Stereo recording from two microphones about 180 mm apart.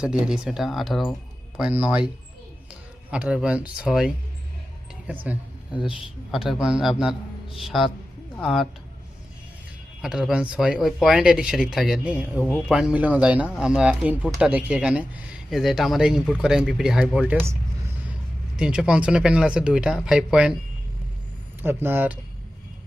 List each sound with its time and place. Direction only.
0.0 s speech: 5° right (ahead or behind)
3.1 s speech: 5° right (ahead or behind)
10.0 s speech: centre (ahead or behind)
21.6 s speech: 10° right (ahead or behind)